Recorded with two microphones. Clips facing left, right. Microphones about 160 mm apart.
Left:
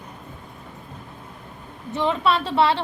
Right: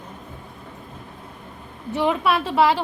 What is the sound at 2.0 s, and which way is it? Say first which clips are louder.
Speech: even; 10° right (ahead or behind).